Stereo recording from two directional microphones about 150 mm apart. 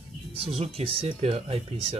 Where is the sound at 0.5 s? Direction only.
40° right (ahead or behind).